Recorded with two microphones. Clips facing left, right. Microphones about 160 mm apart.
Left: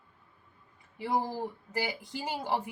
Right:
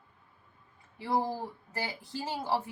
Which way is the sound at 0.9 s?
15° left (ahead or behind).